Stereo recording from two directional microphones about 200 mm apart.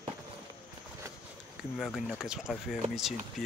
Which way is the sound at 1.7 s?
Centre (ahead or behind).